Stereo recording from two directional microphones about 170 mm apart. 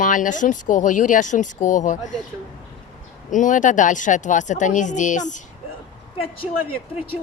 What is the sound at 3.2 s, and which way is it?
Speech, 50° left (ahead or behind).